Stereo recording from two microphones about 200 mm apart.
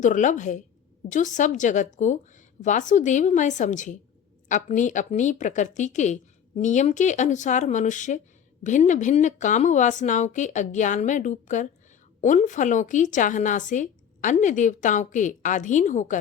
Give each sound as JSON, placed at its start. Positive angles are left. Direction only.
{"t": 0.0, "sound": "a woman's voice", "side_deg": 40}